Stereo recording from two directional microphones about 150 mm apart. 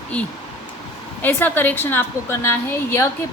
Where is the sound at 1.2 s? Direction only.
10° left (ahead or behind).